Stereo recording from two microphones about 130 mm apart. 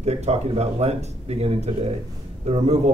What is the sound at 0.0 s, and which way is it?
A man's voice, 55° right (ahead or behind).